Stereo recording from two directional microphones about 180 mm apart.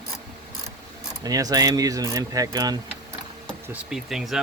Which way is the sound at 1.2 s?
20° right (ahead or behind).